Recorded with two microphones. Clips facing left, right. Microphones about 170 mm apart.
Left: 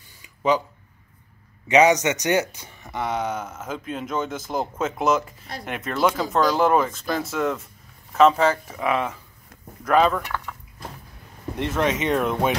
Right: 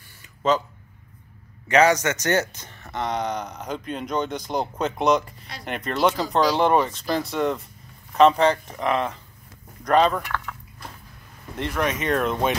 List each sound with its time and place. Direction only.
0.2 s a sound: 10° left (ahead or behind)
1.7 s speech: 15° left (ahead or behind)
11.5 s speech: 20° left (ahead or behind)